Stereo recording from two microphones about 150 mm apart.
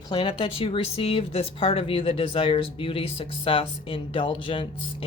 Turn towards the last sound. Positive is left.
turn(degrees=35)  # may be behind; listen again after turning